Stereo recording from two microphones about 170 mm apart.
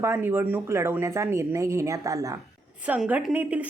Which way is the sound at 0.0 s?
15° right (ahead or behind).